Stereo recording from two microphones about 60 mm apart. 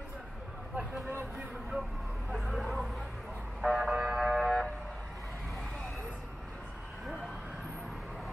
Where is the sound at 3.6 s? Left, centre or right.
Centre.